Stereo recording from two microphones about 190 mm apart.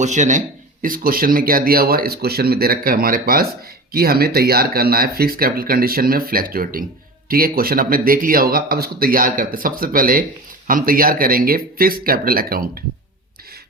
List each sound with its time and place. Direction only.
0.0 s speech: 40° right (ahead or behind)